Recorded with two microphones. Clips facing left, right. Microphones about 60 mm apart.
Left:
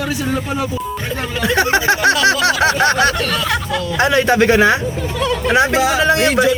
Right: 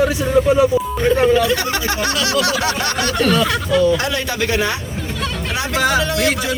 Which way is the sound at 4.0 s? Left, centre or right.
Left.